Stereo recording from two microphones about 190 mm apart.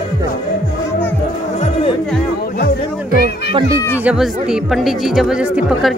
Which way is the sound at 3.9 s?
5° right (ahead or behind).